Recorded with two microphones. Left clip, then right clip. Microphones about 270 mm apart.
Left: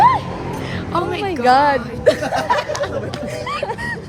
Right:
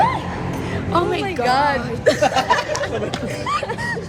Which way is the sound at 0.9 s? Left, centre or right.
Centre.